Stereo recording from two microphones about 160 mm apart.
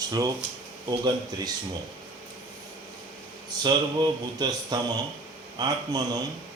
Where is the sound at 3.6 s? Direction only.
25° right (ahead or behind).